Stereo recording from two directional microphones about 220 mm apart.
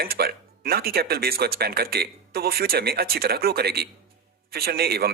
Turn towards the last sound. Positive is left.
turn(degrees=-45)  # may be behind; listen again after turning